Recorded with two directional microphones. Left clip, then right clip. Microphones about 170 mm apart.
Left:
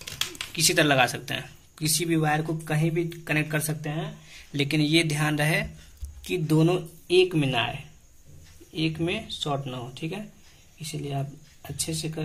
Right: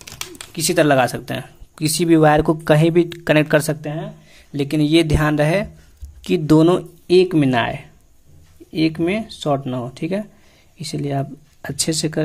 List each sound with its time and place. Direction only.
0.5 s speech: 40° right (ahead or behind)
4.5 s speech: 40° right (ahead or behind)
6.2 s speech: 55° right (ahead or behind)